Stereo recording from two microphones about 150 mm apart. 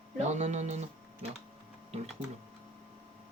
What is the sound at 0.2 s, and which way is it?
Speech, 50° right (ahead or behind).